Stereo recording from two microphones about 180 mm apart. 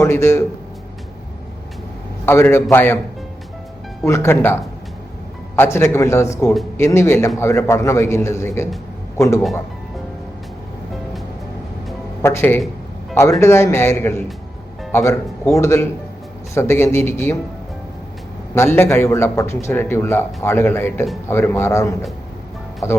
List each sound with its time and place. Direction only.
0.0 s a man's voice: 15° left (ahead or behind)
2.2 s a man's voice: 15° left (ahead or behind)
4.0 s a man's voice: 15° left (ahead or behind)
12.2 s a man's voice: 15° left (ahead or behind)
18.5 s a man's voice: 15° left (ahead or behind)